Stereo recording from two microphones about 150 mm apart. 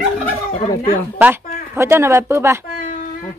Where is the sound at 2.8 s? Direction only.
55° left (ahead or behind).